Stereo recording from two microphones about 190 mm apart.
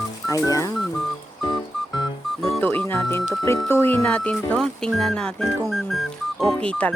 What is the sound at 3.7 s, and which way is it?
Speech, 10° left (ahead or behind).